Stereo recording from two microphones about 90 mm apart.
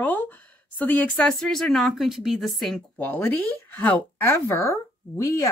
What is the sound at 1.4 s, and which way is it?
A woman's voice, 5° left (ahead or behind).